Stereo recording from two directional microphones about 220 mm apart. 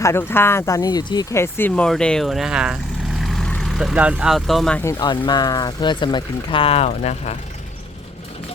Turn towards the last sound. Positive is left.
turn(degrees=30)  # may be behind; listen again after turning